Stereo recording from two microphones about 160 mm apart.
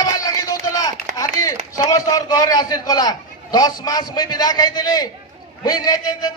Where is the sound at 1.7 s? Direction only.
20° left (ahead or behind).